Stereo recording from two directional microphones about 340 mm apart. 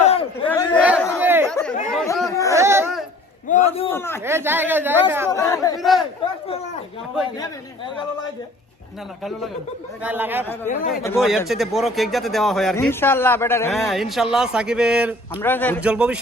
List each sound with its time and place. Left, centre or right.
0.0 s a sound: centre
0.4 s chatter: centre
2.6 s babbling: centre
3.5 s a man's voice: centre
3.9 s speech: centre
4.3 s a man's voice: centre
5.3 s a man's voice: centre
10.0 s a man's voice: centre